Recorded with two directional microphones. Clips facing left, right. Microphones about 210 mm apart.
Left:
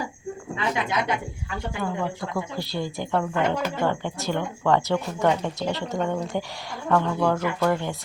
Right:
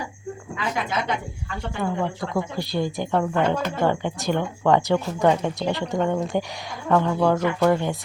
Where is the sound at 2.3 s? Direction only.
15° right (ahead or behind).